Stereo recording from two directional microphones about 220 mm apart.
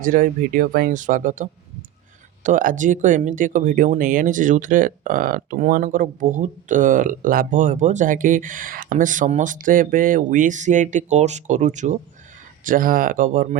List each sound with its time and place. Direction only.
0.0 s speech: 40° right (ahead or behind)